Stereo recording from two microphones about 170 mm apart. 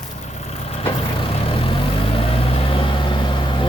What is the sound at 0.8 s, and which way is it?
Vehicle, 30° left (ahead or behind).